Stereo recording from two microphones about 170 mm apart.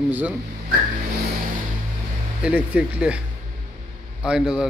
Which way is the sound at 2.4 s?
5° right (ahead or behind).